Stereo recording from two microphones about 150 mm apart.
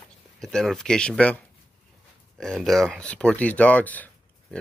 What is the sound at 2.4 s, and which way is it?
Speech, 5° left (ahead or behind).